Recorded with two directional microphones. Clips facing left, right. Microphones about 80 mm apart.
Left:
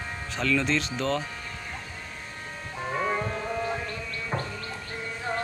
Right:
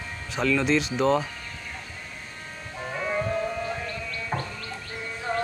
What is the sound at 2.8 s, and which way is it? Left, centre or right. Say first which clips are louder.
Music: left 1 dB; centre.